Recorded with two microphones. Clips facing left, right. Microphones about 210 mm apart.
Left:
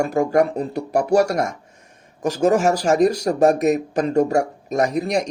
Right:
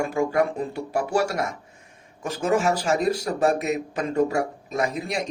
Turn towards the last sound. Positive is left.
turn(degrees=40)  # may be behind; listen again after turning